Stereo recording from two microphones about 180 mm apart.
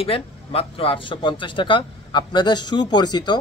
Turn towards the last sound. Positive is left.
turn(degrees=25)  # may be behind; listen again after turning